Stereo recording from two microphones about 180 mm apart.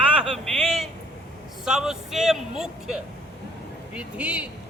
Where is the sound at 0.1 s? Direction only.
Centre (ahead or behind).